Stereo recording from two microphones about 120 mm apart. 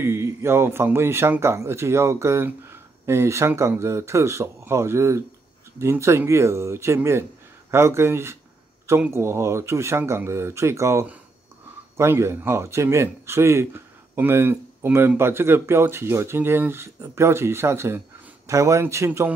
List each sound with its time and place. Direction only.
0.0 s a man's voice: 20° right (ahead or behind)